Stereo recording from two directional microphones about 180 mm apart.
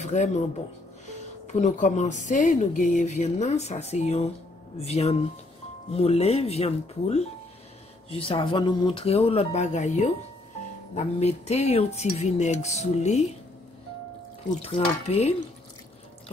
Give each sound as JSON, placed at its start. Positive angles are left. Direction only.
{"t": 0.0, "sound": "speech", "side_deg": 40}
{"t": 1.5, "sound": "speech", "side_deg": 45}
{"t": 14.6, "sound": "speech", "side_deg": 35}